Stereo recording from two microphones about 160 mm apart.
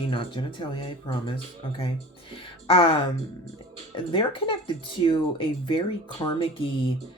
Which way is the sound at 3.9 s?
35° left (ahead or behind).